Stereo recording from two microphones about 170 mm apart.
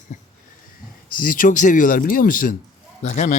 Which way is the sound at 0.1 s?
45° left (ahead or behind).